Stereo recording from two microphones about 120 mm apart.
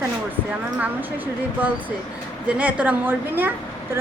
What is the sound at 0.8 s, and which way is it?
Speech, 15° right (ahead or behind).